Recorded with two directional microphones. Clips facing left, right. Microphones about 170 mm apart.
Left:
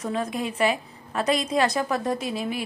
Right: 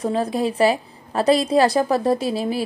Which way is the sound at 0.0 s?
35° right (ahead or behind).